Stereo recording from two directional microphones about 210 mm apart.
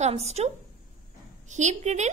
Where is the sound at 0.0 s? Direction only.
30° right (ahead or behind).